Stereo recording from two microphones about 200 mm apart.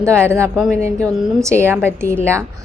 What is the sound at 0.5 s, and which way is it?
Speech, centre (ahead or behind).